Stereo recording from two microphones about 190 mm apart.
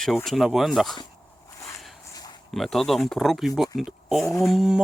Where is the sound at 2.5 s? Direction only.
Centre (ahead or behind).